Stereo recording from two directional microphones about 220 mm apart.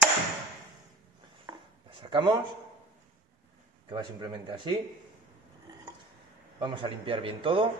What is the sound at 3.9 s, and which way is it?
Speech, 20° right (ahead or behind).